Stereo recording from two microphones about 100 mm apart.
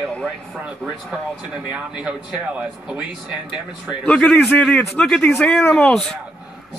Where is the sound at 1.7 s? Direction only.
10° right (ahead or behind).